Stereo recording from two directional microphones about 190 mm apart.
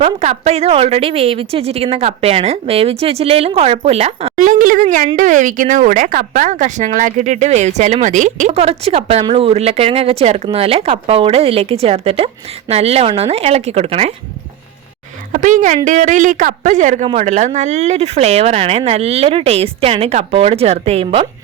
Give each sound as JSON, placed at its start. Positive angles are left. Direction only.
{"t": 0.0, "sound": "speech", "side_deg": -35}
{"t": 4.4, "sound": "speech", "side_deg": -45}
{"t": 15.3, "sound": "speech", "side_deg": -40}